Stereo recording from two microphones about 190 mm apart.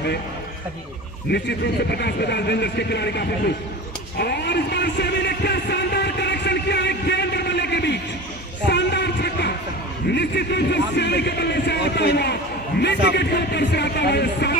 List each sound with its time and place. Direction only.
1.3 s a man's voice: 60° left (ahead or behind)
4.2 s a sound: 60° left (ahead or behind)
8.6 s music: 60° left (ahead or behind)
10.0 s a man's voice: 60° left (ahead or behind)